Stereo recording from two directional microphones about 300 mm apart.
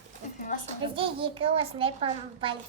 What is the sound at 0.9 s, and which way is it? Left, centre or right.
A child's voice, centre.